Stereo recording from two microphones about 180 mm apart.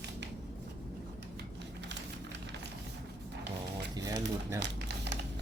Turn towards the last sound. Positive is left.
turn(degrees=-75)  # may be behind; listen again after turning